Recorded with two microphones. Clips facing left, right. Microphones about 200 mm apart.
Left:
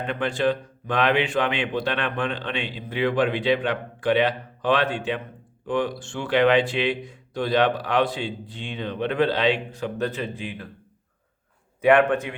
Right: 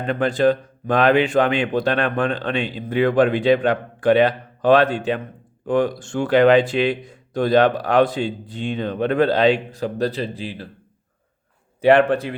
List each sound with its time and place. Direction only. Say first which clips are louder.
0.0 s speech: right 6 dB; 40° right (ahead or behind)
11.8 s a man's voice: right 3 dB; 30° right (ahead or behind)